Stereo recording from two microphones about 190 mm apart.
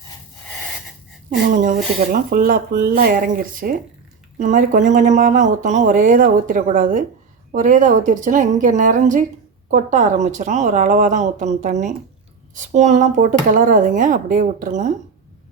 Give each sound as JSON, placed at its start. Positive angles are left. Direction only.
{"t": 1.5, "sound": "speech", "side_deg": -45}